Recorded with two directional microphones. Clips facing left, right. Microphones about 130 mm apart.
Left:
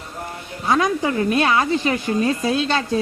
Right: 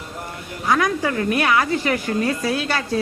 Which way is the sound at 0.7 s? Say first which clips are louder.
Left 1 dB; 25° left (ahead or behind).